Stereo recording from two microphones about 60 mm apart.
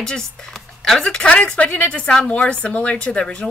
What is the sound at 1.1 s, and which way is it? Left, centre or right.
Speech, centre.